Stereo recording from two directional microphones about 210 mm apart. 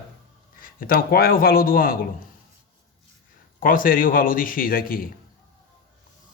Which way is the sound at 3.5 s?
40° left (ahead or behind).